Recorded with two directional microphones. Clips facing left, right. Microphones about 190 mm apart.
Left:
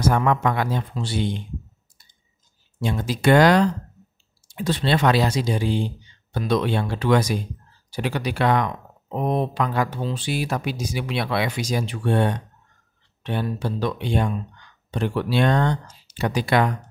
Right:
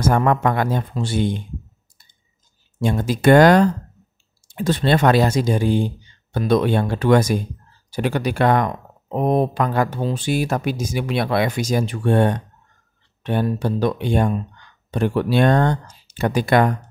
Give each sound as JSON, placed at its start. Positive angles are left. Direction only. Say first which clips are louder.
{"t": 0.0, "sound": "speech", "louder": "right 3 dB", "side_deg": -50}
{"t": 2.8, "sound": "speech", "louder": "right 4 dB", "side_deg": -50}